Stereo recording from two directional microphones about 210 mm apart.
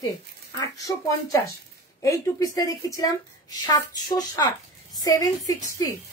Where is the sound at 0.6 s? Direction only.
15° left (ahead or behind).